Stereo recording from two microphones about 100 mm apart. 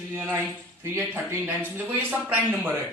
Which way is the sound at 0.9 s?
20° right (ahead or behind).